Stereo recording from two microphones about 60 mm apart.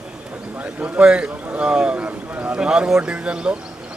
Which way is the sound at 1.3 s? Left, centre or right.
Right.